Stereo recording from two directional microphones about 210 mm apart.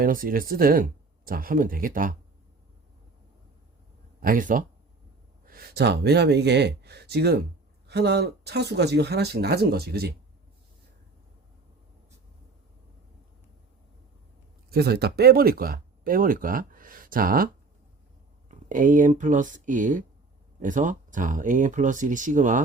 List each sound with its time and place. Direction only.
0.0 s speech: 45° right (ahead or behind)
4.2 s speech: 40° right (ahead or behind)
14.7 s speech: 50° right (ahead or behind)